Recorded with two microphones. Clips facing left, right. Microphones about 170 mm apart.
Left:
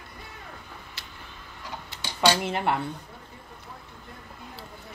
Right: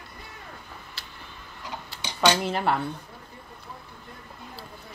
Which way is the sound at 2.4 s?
20° left (ahead or behind).